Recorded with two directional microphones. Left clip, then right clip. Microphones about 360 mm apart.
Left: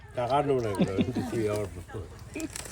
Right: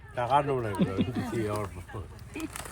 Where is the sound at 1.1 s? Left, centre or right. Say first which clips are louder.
Left 2 dB; centre.